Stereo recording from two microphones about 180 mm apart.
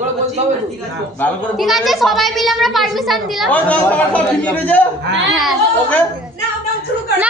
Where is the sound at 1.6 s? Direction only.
Centre (ahead or behind).